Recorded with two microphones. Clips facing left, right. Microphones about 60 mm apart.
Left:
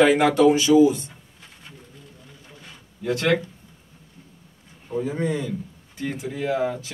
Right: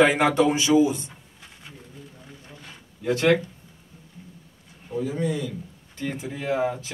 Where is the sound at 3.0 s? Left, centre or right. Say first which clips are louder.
Right 1 dB; centre.